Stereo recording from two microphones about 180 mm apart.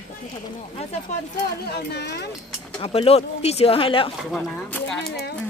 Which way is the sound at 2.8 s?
35° left (ahead or behind).